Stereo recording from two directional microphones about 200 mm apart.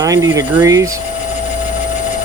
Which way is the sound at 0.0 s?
15° right (ahead or behind).